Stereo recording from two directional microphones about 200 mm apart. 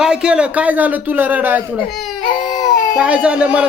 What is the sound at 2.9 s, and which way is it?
Speech, 5° right (ahead or behind).